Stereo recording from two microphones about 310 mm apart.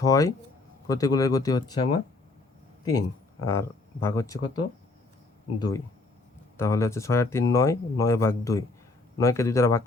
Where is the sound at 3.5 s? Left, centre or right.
Centre.